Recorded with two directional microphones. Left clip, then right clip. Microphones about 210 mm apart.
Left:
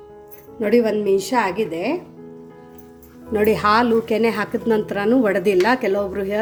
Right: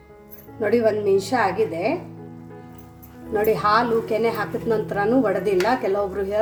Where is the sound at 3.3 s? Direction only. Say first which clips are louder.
Left 2 dB; 40° left (ahead or behind).